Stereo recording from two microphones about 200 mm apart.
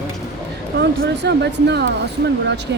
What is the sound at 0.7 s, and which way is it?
Speech, 55° right (ahead or behind).